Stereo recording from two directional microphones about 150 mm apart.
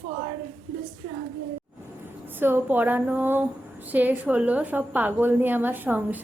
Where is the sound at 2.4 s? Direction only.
15° right (ahead or behind).